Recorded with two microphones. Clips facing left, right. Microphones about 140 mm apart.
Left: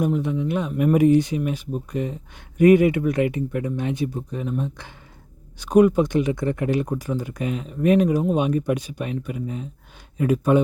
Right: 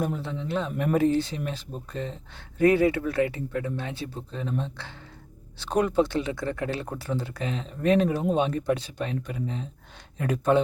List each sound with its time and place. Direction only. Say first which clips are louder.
0.0 s speech: left 7 dB; 15° left (ahead or behind)